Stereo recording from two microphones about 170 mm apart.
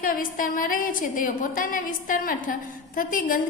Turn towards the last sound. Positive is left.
turn(degrees=55)  # may be behind; listen again after turning